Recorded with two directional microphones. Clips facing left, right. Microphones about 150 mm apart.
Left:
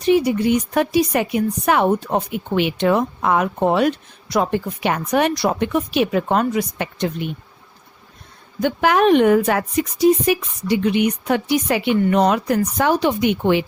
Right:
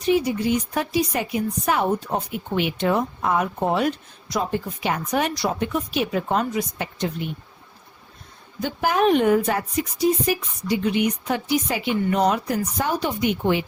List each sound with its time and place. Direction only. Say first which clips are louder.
0.1 s speech: left 4 dB; 65° left (ahead or behind)
8.6 s speech: left 4 dB; 75° left (ahead or behind)
10.2 s speech: left 5 dB; 70° left (ahead or behind)